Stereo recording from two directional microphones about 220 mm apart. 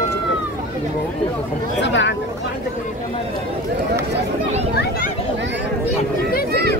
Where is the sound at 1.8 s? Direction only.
55° left (ahead or behind).